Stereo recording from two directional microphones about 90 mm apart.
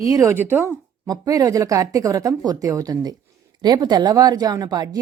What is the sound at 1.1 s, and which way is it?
Speech, 40° right (ahead or behind).